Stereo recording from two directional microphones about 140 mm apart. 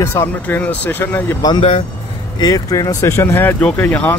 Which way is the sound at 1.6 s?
45° left (ahead or behind).